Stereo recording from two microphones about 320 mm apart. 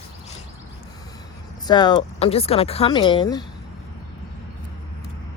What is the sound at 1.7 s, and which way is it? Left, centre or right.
Speech, centre.